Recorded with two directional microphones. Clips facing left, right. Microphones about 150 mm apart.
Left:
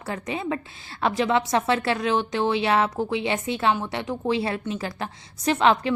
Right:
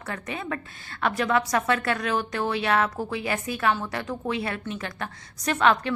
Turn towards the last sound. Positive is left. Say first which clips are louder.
# left 2 dB
turn(degrees=25)  # may be behind; listen again after turning